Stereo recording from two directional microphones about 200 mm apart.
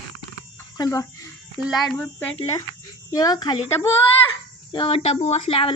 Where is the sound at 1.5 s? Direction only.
Centre (ahead or behind).